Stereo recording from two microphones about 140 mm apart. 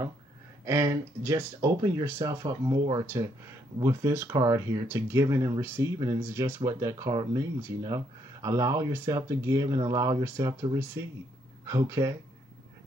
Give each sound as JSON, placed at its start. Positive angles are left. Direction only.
{"t": 0.7, "sound": "speech", "side_deg": -20}
{"t": 6.6, "sound": "speech", "side_deg": -30}